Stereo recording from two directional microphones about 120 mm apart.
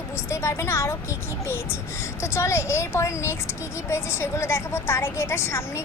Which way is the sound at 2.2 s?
20° left (ahead or behind).